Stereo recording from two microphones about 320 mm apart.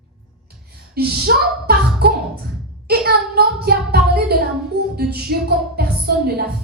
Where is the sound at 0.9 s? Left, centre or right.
Right.